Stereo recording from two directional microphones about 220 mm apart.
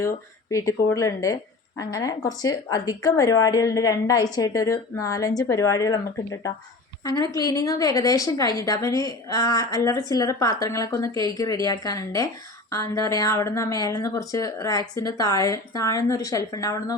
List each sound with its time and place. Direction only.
0.5 s a woman's voice: 15° left (ahead or behind)